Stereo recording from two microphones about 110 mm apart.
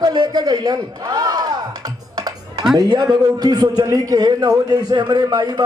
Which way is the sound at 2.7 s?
40° right (ahead or behind).